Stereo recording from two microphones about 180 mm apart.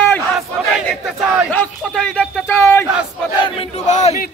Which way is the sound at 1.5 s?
5° left (ahead or behind).